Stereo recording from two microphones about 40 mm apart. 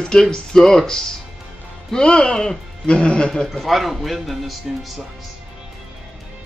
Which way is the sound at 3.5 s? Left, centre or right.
Centre.